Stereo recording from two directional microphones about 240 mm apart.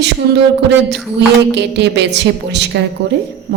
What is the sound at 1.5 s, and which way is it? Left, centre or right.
A woman's voice, right.